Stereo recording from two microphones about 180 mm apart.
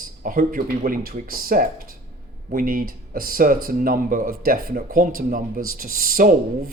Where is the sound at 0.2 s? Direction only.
50° right (ahead or behind).